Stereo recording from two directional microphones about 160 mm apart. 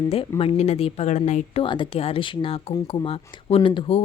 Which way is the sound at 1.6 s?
30° left (ahead or behind).